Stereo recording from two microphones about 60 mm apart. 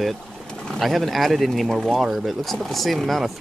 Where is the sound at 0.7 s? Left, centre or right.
Centre.